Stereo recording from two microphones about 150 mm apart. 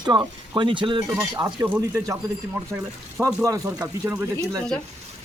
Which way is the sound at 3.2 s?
20° right (ahead or behind).